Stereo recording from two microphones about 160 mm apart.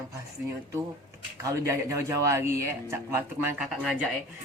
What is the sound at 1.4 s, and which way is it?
Speech, 20° right (ahead or behind).